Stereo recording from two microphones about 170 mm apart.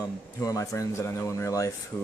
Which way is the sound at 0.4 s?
20° left (ahead or behind).